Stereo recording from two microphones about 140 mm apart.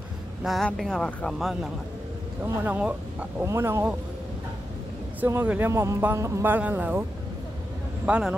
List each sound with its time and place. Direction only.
0.4 s speech: centre (ahead or behind); by 3.9 s 20° right (ahead or behind)
5.2 s speech: 10° right (ahead or behind)